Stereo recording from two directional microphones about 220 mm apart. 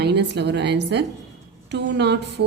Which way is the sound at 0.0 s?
50° right (ahead or behind).